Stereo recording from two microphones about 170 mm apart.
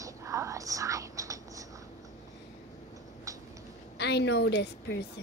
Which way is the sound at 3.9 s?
80° left.